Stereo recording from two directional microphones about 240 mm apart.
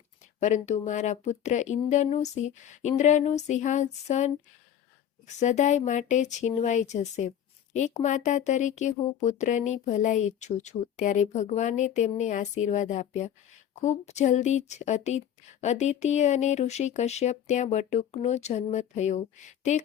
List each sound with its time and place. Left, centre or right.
0.3 s speech: left